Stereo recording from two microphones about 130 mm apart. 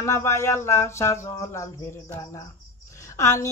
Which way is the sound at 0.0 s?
20° left (ahead or behind).